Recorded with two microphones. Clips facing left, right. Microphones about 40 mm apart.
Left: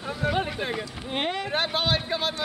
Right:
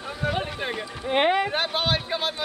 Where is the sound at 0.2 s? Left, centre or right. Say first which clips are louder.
Even; centre.